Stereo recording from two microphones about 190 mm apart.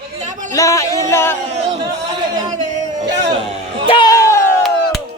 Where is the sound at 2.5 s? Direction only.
40° right (ahead or behind).